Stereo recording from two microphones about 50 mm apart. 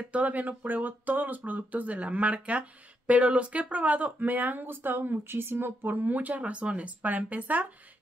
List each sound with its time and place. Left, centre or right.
0.1 s speech: right